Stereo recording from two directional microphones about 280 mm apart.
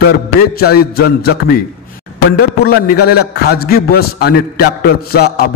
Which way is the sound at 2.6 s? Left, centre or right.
Left.